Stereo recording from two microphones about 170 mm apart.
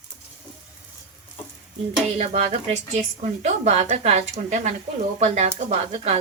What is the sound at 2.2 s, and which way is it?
Speech, 40° right (ahead or behind).